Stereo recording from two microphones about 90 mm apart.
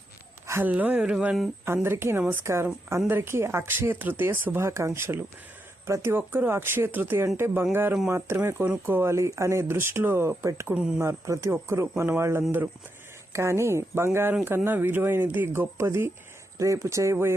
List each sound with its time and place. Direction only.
0.6 s speech: 20° right (ahead or behind)
1.6 s speech: 25° right (ahead or behind)
10.8 s speech: 10° right (ahead or behind)
11.0 s speech: 35° right (ahead or behind)